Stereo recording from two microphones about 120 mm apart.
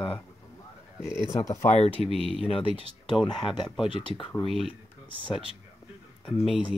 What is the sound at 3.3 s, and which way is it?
Speech, 40° left (ahead or behind).